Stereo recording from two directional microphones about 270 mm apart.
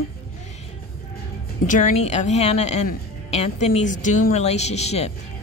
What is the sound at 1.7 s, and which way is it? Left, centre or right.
A woman's voice, left.